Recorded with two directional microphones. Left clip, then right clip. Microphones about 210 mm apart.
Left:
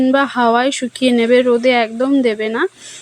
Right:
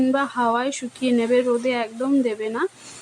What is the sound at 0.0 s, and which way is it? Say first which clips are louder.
A woman's voice: left 7 dB; 25° left (ahead or behind).